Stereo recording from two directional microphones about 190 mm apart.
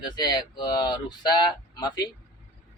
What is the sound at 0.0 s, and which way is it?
A man's voice, 20° left (ahead or behind).